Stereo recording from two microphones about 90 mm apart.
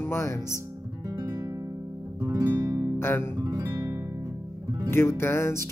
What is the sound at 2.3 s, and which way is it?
Music, 40° right (ahead or behind).